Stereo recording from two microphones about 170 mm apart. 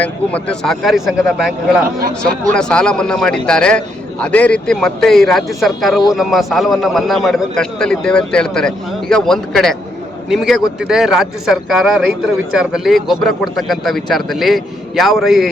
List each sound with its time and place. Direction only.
0.0 s a man's voice: 5° left (ahead or behind)
2.0 s speech: 55° right (ahead or behind)
2.5 s a man's voice: 5° left (ahead or behind)